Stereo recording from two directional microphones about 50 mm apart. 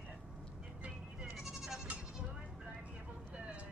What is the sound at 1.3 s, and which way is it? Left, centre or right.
Bleat, centre.